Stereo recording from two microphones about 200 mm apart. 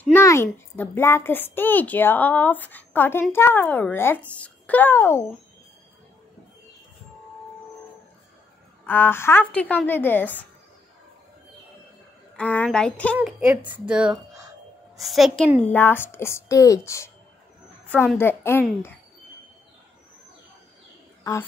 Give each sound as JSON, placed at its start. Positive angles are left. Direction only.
{"t": 0.0, "sound": "a woman's voice", "side_deg": 10}
{"t": 8.8, "sound": "a woman's voice", "side_deg": 10}
{"t": 12.4, "sound": "a woman's voice", "side_deg": 5}
{"t": 18.1, "sound": "a woman's voice", "side_deg": 10}
{"t": 21.2, "sound": "a sound", "side_deg": 15}